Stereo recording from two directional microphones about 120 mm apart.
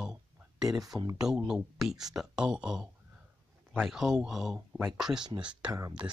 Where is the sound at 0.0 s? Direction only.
5° right (ahead or behind).